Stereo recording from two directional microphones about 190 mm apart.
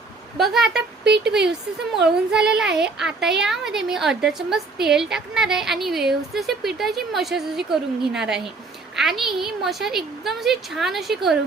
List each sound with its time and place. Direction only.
0.3 s a woman's voice: centre (ahead or behind)
1.0 s speech: 60° right (ahead or behind)
2.0 s a woman's voice: 5° right (ahead or behind)